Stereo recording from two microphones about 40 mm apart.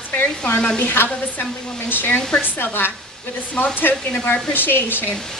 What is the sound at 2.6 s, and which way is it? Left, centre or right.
Speech, left.